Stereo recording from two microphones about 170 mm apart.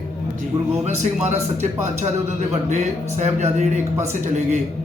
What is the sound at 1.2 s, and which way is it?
Speech, 40° right (ahead or behind).